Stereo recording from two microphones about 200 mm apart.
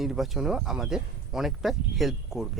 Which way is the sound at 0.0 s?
Centre (ahead or behind).